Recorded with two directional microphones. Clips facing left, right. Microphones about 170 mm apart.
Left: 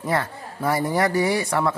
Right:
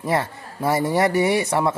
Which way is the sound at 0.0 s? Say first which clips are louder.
Right 2 dB; 25° right (ahead or behind).